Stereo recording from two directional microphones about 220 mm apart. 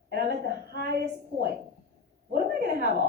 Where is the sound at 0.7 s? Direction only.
45° right (ahead or behind).